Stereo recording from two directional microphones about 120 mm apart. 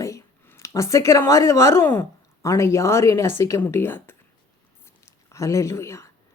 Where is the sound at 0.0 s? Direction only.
25° left (ahead or behind).